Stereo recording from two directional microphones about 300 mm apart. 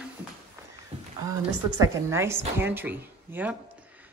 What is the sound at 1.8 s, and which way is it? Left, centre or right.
Speech, centre.